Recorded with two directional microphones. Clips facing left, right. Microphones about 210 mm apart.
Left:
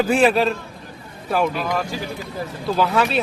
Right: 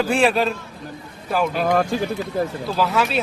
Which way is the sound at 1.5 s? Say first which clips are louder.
Right 5 dB; 45° right (ahead or behind).